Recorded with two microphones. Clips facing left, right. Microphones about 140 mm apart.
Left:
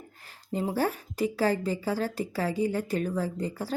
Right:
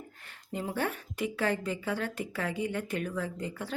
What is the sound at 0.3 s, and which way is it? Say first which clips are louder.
A woman's voice: left 6 dB; 35° left (ahead or behind).